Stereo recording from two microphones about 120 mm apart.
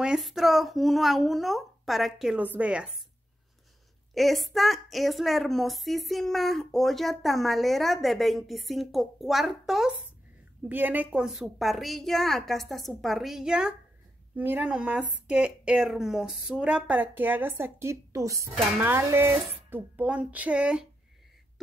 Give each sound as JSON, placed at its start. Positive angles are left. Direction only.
{"t": 0.0, "sound": "a woman's voice", "side_deg": -5}
{"t": 4.1, "sound": "a woman's voice", "side_deg": 0}
{"t": 10.7, "sound": "a woman's voice", "side_deg": -15}
{"t": 18.8, "sound": "dishes", "side_deg": -20}
{"t": 19.7, "sound": "a woman's voice", "side_deg": -10}